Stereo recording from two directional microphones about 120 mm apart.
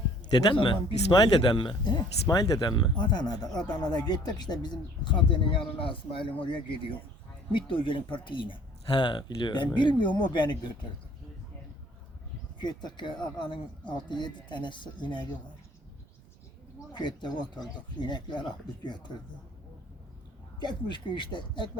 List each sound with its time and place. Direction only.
0.5 s speech: 45° left (ahead or behind)
7.5 s speech: 45° left (ahead or behind)
12.5 s speech: 35° left (ahead or behind)
17.0 s speech: 40° left (ahead or behind)
20.6 s speech: 40° left (ahead or behind)